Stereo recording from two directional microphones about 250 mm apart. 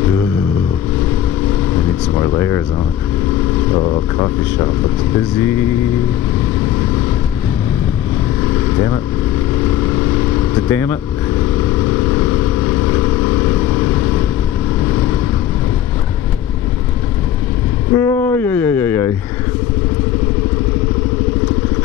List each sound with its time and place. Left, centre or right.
2.1 s speech: centre
3.8 s speech: centre
8.7 s speech: centre
10.7 s speech: centre
17.9 s speech: centre